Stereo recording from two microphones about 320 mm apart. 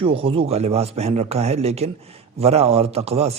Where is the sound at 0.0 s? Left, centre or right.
Centre.